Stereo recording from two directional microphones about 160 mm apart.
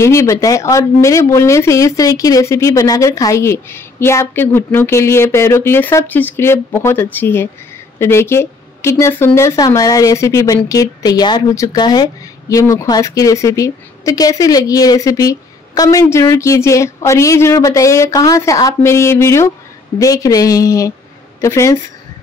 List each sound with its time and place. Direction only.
0.0 s speech: 15° left (ahead or behind)